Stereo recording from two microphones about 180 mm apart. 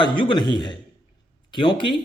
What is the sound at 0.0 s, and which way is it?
A man's voice, 25° left (ahead or behind).